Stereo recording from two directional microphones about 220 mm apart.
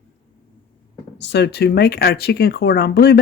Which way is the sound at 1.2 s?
50° left (ahead or behind).